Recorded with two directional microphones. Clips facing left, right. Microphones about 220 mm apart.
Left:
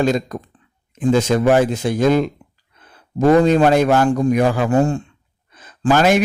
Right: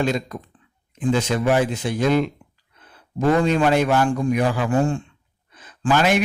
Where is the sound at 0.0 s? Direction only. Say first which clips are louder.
Left 5 dB; 40° left (ahead or behind).